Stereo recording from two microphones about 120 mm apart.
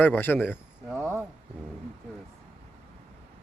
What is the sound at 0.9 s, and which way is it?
Speech, 20° right (ahead or behind).